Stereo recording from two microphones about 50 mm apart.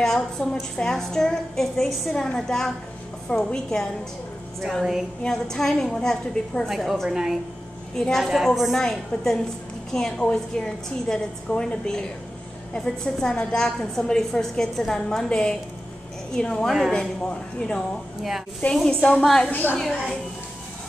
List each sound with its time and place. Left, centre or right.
0.0 s a woman's voice: centre
5.2 s a woman's voice: centre
6.7 s a woman's voice: centre
7.9 s a woman's voice: centre
8.2 s a woman's voice: centre
8.7 s a woman's voice: centre
18.6 s a woman's voice: left
19.2 s a woman's voice: centre
19.5 s a woman's voice: left